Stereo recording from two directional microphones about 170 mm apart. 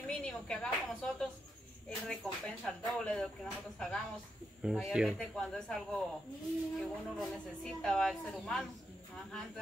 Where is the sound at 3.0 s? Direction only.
5° left (ahead or behind).